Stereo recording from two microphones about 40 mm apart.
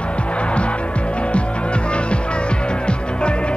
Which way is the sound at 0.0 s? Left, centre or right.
Left.